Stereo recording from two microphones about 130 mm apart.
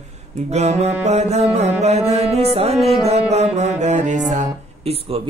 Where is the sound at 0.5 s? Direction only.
60° right (ahead or behind).